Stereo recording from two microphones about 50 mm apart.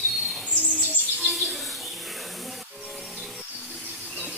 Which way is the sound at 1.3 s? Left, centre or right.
Centre.